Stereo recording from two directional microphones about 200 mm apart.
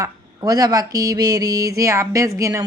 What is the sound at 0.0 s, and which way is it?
A woman's voice, 20° right (ahead or behind).